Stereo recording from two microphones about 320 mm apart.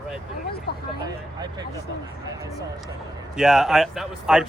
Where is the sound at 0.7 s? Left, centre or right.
Left.